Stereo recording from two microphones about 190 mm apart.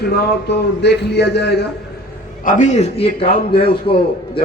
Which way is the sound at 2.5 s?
40° left (ahead or behind).